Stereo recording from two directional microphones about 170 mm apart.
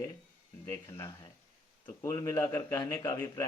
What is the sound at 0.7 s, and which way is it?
Speech, 15° left (ahead or behind).